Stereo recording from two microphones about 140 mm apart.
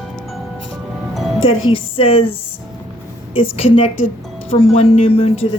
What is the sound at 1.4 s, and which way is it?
Speech, 40° left (ahead or behind).